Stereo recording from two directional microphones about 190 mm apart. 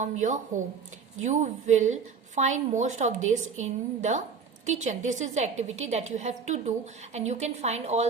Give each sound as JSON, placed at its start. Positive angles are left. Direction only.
{"t": 0.0, "sound": "a woman's voice", "side_deg": -40}